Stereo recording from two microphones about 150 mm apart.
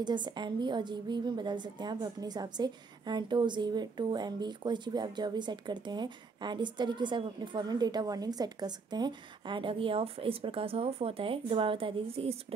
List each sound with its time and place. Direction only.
0.0 s a woman's voice: 30° right (ahead or behind)